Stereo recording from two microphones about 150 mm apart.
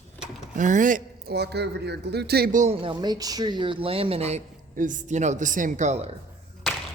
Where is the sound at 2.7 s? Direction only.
35° right (ahead or behind).